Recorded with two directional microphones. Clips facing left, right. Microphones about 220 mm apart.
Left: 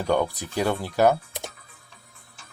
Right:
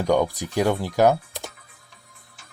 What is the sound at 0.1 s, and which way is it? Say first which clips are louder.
A man's voice: right 2 dB; 15° right (ahead or behind).